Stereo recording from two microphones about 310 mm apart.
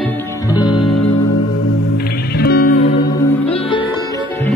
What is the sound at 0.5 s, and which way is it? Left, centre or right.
Music, centre.